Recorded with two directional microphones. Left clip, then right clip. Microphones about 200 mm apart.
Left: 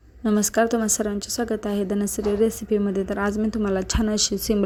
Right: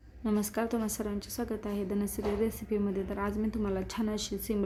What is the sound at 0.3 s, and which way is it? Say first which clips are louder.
A woman's voice: left 12 dB; 25° left (ahead or behind).